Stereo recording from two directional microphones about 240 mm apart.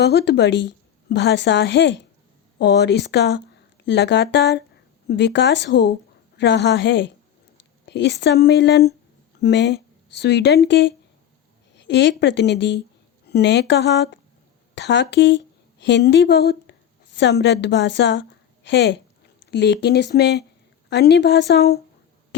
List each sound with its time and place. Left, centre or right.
0.0 s a woman's voice: left